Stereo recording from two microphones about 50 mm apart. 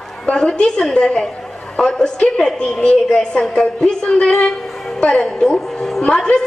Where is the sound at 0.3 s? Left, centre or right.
Centre.